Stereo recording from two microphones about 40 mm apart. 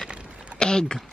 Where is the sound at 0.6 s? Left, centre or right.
Centre.